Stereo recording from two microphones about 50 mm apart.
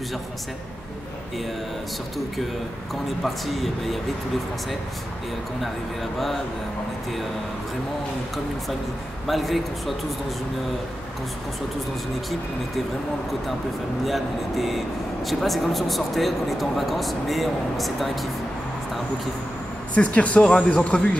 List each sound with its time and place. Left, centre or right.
3.3 s speech: centre
9.3 s speech: centre
14.0 s speech: centre
19.9 s speech: left